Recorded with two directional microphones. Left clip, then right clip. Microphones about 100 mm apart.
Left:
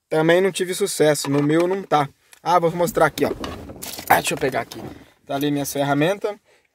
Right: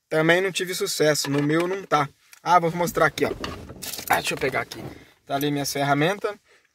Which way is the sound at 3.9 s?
50° left (ahead or behind).